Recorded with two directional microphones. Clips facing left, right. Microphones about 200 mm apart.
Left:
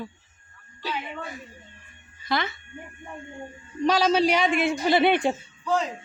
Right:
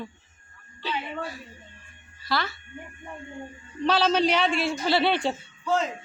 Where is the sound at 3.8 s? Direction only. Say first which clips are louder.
Left 2 dB; 10° left (ahead or behind).